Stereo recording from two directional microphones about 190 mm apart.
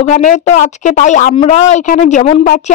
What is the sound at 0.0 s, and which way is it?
A woman's voice, 40° left (ahead or behind).